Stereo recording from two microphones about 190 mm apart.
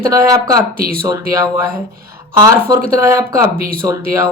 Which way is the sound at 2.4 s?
15° right (ahead or behind).